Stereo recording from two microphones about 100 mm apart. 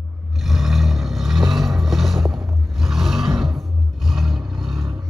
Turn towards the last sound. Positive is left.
turn(degrees=0)  # may be behind; listen again after turning